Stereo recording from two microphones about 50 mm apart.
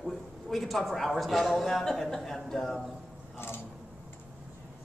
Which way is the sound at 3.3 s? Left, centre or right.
Left.